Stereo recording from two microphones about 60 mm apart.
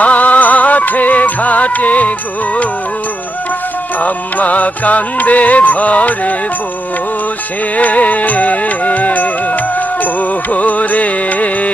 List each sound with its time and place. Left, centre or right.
0.0 s music: left
4.0 s music: left
7.8 s music: left